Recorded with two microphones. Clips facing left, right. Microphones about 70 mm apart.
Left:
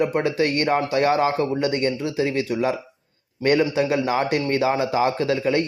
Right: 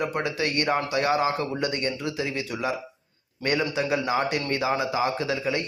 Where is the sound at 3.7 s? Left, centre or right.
Left.